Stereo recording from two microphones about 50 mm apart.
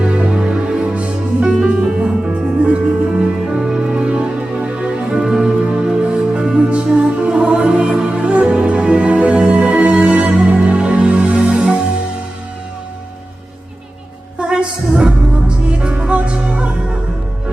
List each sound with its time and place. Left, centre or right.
0.0 s music: centre
14.3 s music: centre